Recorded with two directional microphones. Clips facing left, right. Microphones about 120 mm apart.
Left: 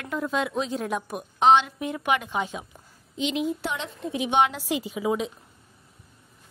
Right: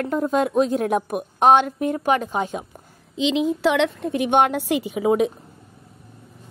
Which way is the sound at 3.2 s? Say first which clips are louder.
Right 6 dB; 90° right.